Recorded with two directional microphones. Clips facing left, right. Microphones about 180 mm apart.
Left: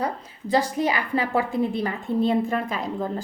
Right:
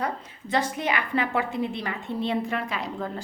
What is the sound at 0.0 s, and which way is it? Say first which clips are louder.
A woman's voice: left 2 dB; 35° left (ahead or behind).